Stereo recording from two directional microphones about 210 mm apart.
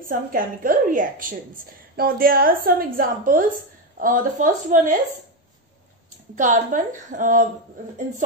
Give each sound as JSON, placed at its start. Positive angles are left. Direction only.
{"t": 0.0, "sound": "a woman's voice", "side_deg": -40}
{"t": 6.3, "sound": "a woman's voice", "side_deg": -35}